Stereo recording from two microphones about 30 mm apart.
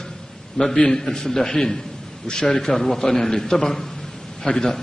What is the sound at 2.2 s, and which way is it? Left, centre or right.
Speech, left.